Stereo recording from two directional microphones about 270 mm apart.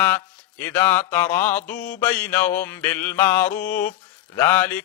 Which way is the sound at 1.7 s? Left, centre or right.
Left.